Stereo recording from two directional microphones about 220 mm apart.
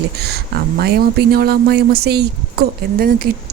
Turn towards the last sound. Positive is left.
turn(degrees=-45)  # may be behind; listen again after turning